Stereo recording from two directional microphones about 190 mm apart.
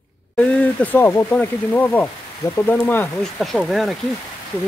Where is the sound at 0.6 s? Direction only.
10° left (ahead or behind).